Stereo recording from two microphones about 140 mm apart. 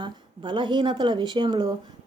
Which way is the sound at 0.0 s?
35° right (ahead or behind).